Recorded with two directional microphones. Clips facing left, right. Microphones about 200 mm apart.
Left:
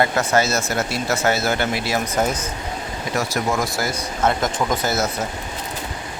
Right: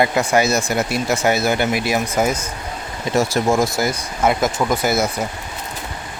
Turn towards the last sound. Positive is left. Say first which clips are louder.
# right 3 dB
turn(degrees=-10)  # may be behind; listen again after turning